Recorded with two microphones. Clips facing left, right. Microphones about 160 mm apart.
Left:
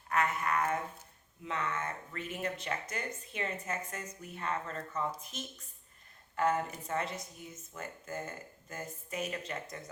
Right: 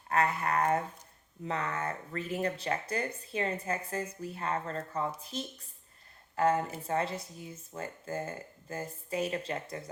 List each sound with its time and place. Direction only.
0.1 s speech: 35° right (ahead or behind)